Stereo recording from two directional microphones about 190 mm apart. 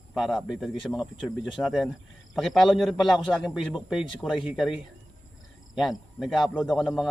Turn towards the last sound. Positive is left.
turn(degrees=0)  # may be behind; listen again after turning